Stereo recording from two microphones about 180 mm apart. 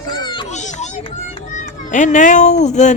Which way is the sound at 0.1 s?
25° left (ahead or behind).